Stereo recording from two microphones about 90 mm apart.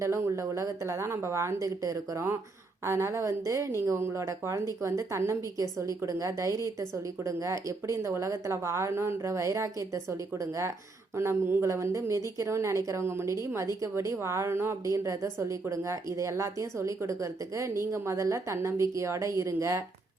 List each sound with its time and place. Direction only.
0.0 s a woman's voice: 30° right (ahead or behind)